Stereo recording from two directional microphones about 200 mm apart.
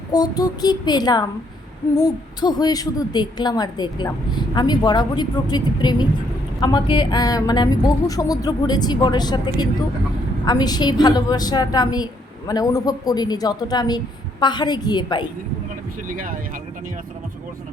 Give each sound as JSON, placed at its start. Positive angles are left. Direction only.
{"t": 0.1, "sound": "a woman's voice", "side_deg": 20}
{"t": 16.0, "sound": "speech", "side_deg": -40}